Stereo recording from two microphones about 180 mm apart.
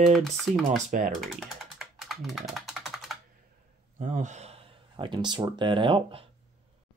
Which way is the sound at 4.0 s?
40° right (ahead or behind).